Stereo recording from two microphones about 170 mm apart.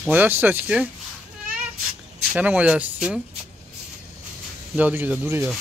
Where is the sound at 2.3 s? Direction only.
10° right (ahead or behind).